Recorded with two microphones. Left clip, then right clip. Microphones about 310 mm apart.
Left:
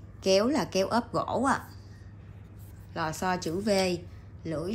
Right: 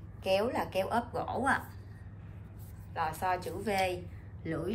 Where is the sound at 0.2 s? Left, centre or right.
Left.